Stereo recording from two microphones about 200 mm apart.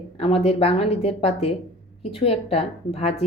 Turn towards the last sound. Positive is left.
turn(degrees=30)  # may be behind; listen again after turning